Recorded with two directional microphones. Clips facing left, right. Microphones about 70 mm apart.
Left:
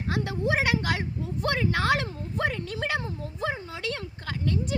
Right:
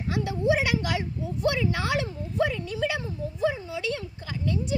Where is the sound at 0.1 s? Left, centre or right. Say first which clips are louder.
Right 2 dB; left.